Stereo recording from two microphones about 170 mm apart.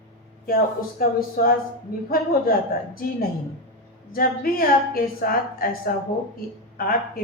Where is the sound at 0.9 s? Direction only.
55° left (ahead or behind).